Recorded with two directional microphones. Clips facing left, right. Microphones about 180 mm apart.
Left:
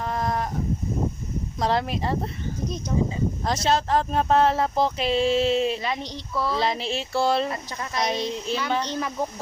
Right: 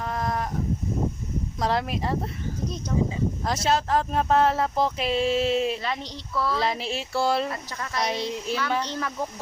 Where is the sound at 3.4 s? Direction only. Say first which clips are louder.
Left 2 dB; 5° right (ahead or behind).